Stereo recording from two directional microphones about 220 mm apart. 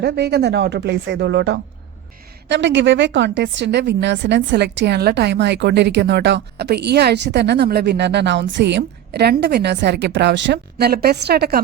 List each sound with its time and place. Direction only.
0.0 s a woman's voice: 50° right (ahead or behind)